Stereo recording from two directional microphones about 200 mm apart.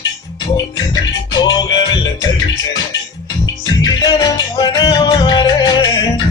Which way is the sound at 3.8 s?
20° left (ahead or behind).